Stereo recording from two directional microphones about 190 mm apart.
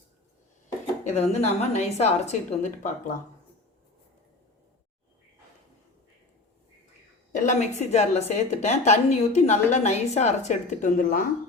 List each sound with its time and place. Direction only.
1.1 s a woman's voice: 35° left (ahead or behind)
7.3 s a woman's voice: 40° left (ahead or behind)